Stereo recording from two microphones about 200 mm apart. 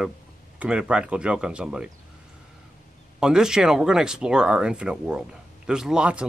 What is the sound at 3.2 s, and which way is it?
Speech, 5° right (ahead or behind).